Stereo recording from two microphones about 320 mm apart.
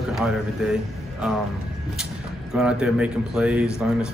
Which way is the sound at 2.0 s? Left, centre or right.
Centre.